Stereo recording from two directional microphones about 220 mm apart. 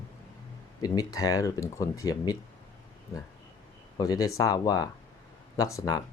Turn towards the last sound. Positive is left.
turn(degrees=15)  # may be behind; listen again after turning